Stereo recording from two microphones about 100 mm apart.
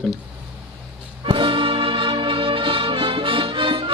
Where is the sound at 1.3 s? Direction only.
55° right (ahead or behind).